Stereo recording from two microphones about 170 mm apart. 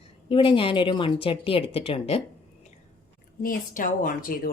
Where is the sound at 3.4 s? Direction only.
55° left (ahead or behind).